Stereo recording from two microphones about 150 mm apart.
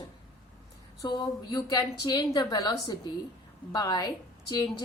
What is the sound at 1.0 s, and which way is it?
A woman's voice, 30° left (ahead or behind).